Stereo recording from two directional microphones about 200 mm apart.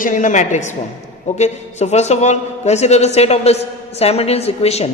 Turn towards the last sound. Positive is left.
turn(degrees=30)  # may be behind; listen again after turning